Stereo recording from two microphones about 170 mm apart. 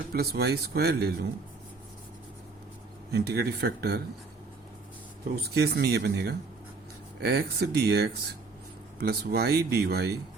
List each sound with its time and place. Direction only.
0.1 s speech: 70° right (ahead or behind)
3.1 s speech: 75° right (ahead or behind)
5.4 s speech: 70° right (ahead or behind)